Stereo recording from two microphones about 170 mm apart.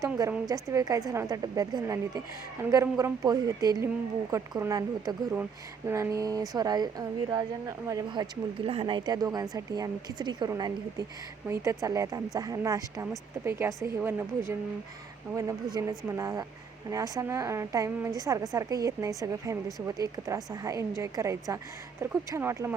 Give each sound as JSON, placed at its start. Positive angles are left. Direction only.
{"t": 0.0, "sound": "speech", "side_deg": -20}
{"t": 8.6, "sound": "a woman's voice", "side_deg": -35}